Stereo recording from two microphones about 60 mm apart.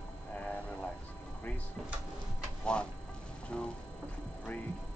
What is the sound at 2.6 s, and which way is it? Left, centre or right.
Speech, centre.